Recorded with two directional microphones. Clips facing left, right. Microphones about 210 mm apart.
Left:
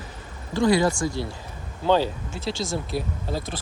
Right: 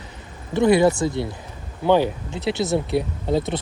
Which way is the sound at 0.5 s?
20° right (ahead or behind).